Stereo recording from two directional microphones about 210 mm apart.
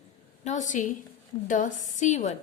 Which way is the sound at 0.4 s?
35° left (ahead or behind).